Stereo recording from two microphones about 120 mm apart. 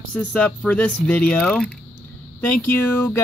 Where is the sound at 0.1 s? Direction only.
10° left (ahead or behind).